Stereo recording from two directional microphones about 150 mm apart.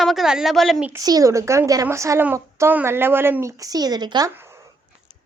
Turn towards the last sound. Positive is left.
turn(degrees=-25)  # may be behind; listen again after turning